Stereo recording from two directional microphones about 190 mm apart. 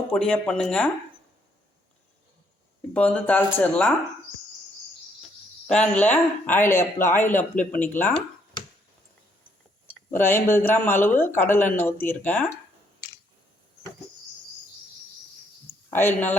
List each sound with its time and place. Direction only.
0.1 s speech: 5° left (ahead or behind)
2.9 s speech: 10° left (ahead or behind)
5.6 s speech: 5° left (ahead or behind)
9.8 s speech: 10° left (ahead or behind)
15.9 s speech: 10° left (ahead or behind)